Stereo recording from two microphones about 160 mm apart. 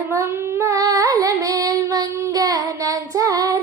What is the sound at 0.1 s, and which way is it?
Singing, 15° right (ahead or behind).